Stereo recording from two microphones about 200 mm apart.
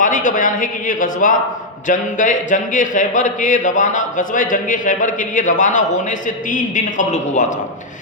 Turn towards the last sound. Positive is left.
turn(degrees=40)  # may be behind; listen again after turning